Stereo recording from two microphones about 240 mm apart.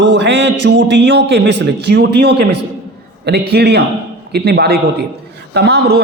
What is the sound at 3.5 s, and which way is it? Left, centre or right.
A man's voice, right.